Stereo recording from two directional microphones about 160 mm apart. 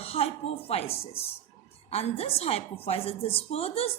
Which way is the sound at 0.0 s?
40° left (ahead or behind).